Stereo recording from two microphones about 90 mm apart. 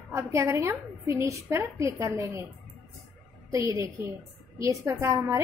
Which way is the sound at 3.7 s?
35° right (ahead or behind).